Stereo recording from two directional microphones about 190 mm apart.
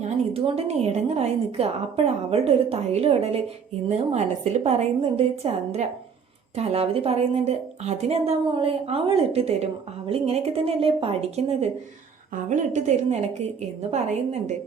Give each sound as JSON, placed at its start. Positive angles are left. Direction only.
{"t": 0.0, "sound": "a woman's voice", "side_deg": -30}